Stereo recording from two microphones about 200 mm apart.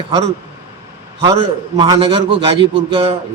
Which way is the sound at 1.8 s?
25° right (ahead or behind).